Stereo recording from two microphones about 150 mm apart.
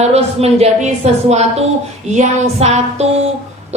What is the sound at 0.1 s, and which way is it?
A woman's voice, 45° right (ahead or behind).